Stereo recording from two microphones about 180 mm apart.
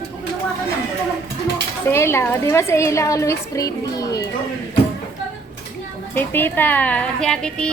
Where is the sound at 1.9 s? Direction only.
15° left (ahead or behind).